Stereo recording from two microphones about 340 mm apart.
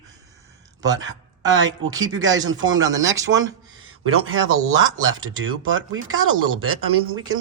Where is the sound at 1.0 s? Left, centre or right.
Right.